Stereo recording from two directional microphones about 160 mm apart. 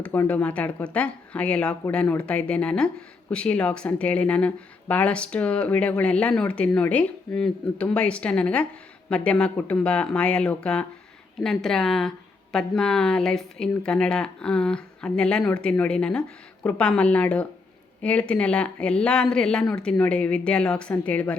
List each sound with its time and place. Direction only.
0.0 s speech: 10° left (ahead or behind)